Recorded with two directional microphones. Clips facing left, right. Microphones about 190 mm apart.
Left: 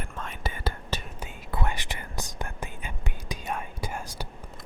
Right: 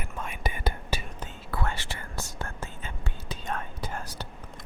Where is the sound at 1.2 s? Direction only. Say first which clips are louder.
Left 1 dB; 20° left (ahead or behind).